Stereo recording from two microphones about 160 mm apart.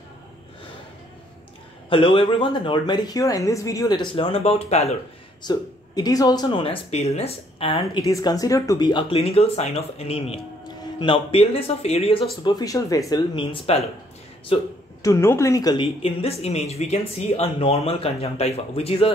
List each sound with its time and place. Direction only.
1.9 s speech: 35° left (ahead or behind)
5.4 s speech: 25° left (ahead or behind)
8.1 s speech: 20° left (ahead or behind)
12.4 s speech: 25° left (ahead or behind)
15.0 s speech: 20° left (ahead or behind); by 19.1 s 35° left (ahead or behind)